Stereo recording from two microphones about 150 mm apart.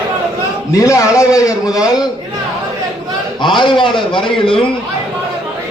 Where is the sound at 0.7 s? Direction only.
20° left (ahead or behind).